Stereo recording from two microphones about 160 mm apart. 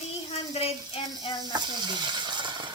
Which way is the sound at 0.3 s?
40° left (ahead or behind).